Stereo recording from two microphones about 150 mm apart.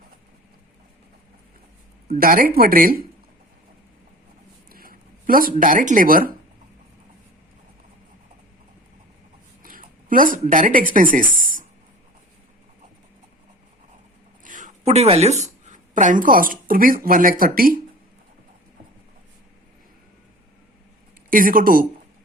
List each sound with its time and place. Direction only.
2.1 s speech: 70° right (ahead or behind)
4.7 s speech: 75° right (ahead or behind)
9.6 s speech: 65° right (ahead or behind)
14.4 s speech: 60° right (ahead or behind)
21.2 s speech: 70° right (ahead or behind)